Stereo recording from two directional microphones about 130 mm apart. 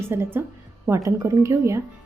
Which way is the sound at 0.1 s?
15° right (ahead or behind).